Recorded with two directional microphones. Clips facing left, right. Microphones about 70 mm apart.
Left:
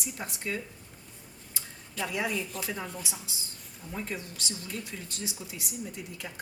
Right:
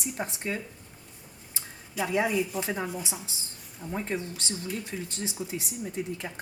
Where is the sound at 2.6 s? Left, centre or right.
Right.